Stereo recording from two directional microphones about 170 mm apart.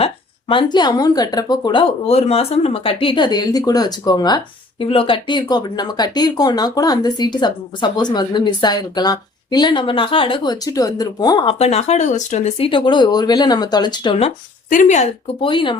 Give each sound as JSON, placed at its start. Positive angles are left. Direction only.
{"t": 0.0, "sound": "speech", "side_deg": 30}
{"t": 2.0, "sound": "speech", "side_deg": 35}
{"t": 11.5, "sound": "speech", "side_deg": 40}
{"t": 14.7, "sound": "speech", "side_deg": 45}